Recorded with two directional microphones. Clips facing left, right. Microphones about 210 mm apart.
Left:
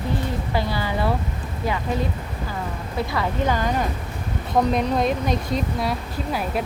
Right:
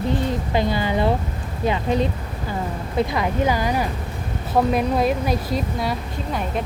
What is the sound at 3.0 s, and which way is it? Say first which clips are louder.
A woman's voice: right 3 dB; 15° right (ahead or behind).